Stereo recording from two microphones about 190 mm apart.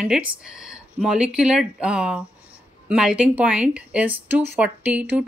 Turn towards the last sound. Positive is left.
turn(degrees=-5)  # may be behind; listen again after turning